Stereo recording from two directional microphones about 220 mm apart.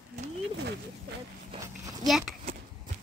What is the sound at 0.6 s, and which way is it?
Speech, 50° right (ahead or behind).